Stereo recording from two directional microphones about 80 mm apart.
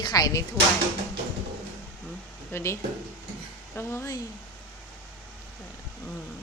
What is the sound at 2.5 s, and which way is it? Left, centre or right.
Speech, left.